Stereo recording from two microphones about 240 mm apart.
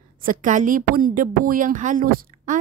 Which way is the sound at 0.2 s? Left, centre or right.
Right.